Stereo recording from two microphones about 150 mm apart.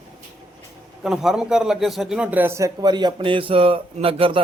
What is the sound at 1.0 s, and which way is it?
A man's voice, 5° right (ahead or behind).